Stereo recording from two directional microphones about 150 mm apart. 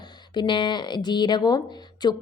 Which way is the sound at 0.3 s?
30° left (ahead or behind).